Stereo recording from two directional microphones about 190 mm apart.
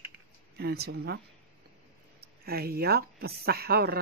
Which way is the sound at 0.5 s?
60° right (ahead or behind).